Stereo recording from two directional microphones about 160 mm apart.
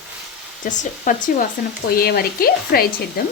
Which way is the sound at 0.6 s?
50° left (ahead or behind).